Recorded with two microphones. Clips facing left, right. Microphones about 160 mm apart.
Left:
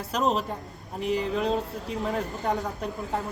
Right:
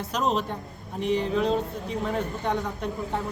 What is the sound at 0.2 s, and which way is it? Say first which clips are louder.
Speech: left 1 dB; centre (ahead or behind).